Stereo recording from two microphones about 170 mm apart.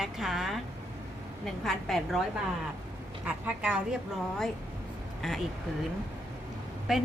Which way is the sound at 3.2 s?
5° right (ahead or behind).